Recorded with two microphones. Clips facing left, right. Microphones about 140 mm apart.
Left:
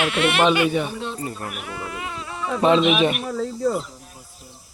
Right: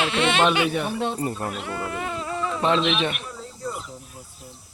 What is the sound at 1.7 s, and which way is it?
Speech, 45° right (ahead or behind).